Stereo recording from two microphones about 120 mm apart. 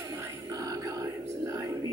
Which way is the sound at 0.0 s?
25° right (ahead or behind).